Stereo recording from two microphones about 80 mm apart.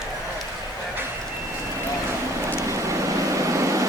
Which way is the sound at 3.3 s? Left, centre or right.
Right.